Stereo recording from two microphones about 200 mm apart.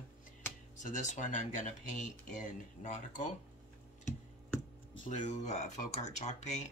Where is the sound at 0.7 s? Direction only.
40° left (ahead or behind).